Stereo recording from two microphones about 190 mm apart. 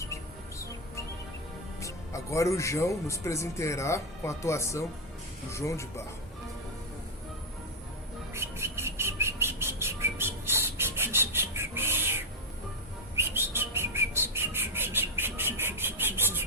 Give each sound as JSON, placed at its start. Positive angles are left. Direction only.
{"t": 1.8, "sound": "speech", "side_deg": 15}
{"t": 8.3, "sound": "a sound", "side_deg": -15}
{"t": 13.1, "sound": "bird", "side_deg": -10}